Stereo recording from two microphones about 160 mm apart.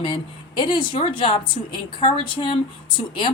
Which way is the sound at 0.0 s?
30° left (ahead or behind).